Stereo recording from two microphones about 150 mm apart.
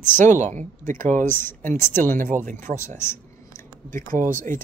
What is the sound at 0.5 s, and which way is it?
Speech, 60° right (ahead or behind).